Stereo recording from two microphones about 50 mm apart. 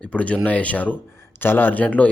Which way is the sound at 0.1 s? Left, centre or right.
Left.